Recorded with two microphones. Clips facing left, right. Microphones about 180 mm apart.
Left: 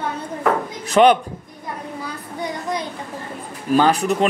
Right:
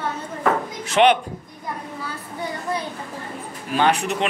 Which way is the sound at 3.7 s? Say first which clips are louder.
Left 4 dB; 35° left (ahead or behind).